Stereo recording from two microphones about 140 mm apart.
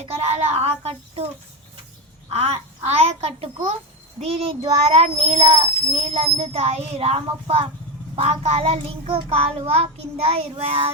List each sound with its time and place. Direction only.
0.0 s child singing: 50° right (ahead or behind)
2.3 s child singing: 50° right (ahead or behind)